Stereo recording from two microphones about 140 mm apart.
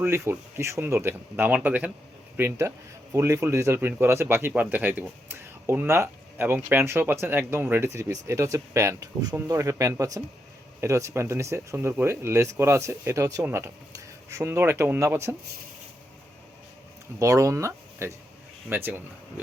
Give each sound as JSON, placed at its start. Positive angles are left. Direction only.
{"t": 0.0, "sound": "speech", "side_deg": -15}
{"t": 17.2, "sound": "speech", "side_deg": -25}